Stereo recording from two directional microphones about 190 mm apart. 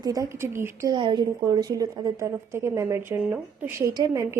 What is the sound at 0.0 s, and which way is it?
A woman's voice, 20° right (ahead or behind).